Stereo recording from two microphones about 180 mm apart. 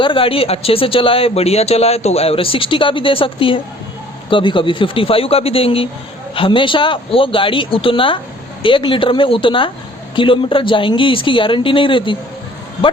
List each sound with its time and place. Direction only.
0.0 s a woman's voice: 30° left (ahead or behind)